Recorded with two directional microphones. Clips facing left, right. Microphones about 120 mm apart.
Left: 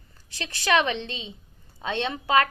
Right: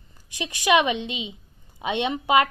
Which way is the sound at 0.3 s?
15° right (ahead or behind).